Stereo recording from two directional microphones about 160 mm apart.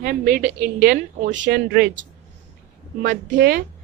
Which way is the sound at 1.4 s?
75° right (ahead or behind).